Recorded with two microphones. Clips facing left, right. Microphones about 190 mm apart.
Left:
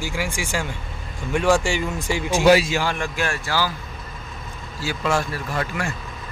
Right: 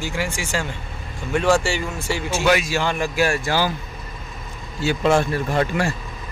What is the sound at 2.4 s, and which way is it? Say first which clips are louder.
Speech: left 4 dB; 35° left (ahead or behind).